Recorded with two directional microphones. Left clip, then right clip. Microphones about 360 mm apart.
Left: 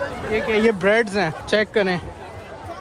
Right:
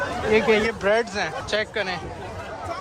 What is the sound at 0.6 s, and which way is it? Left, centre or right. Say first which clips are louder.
Speech: left 4 dB; left.